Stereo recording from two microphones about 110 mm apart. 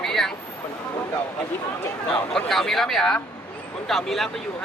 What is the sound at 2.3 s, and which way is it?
Speech, 5° left (ahead or behind).